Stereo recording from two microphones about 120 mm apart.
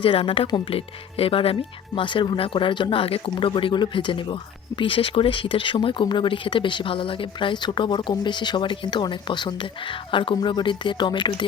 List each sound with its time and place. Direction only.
0.0 s speech: 50° left (ahead or behind)